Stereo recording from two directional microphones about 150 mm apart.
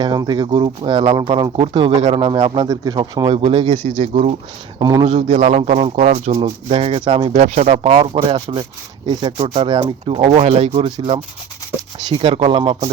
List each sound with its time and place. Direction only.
0.0 s a man's voice: 30° right (ahead or behind); by 4.4 s 45° right (ahead or behind)
4.8 s speech: 25° right (ahead or behind)
5.0 s speech: 45° right (ahead or behind)
7.3 s speech: 50° right (ahead or behind)
7.9 s a man's voice: 40° right (ahead or behind)